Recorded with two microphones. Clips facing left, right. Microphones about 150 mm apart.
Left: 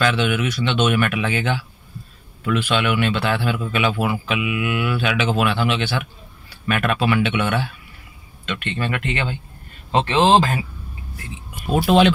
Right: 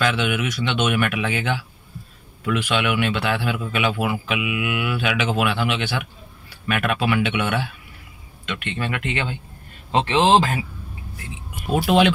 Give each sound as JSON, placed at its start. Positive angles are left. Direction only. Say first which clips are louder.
{"t": 0.0, "sound": "speech", "louder": "left 2 dB", "side_deg": -10}
{"t": 10.2, "sound": "speech", "louder": "left 2 dB", "side_deg": 30}
{"t": 11.7, "sound": "speech", "louder": "left 2 dB", "side_deg": -10}